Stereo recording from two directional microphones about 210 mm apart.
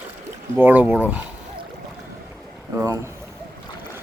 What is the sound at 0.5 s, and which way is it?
Speech, 10° right (ahead or behind).